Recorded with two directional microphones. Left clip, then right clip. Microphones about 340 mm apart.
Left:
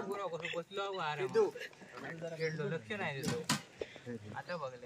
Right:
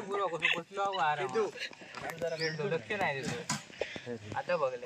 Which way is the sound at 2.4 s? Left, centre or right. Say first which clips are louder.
Left 1 dB; right.